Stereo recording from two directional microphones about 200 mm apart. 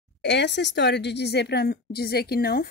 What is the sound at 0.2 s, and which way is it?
A woman's voice, 60° left (ahead or behind).